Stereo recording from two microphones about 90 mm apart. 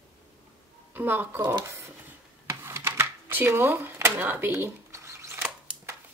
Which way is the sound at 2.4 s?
30° right (ahead or behind).